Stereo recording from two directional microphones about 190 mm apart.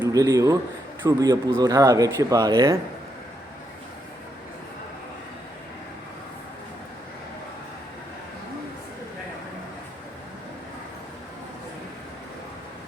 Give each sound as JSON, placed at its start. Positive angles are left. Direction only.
{"t": 0.1, "sound": "a man's voice", "side_deg": -20}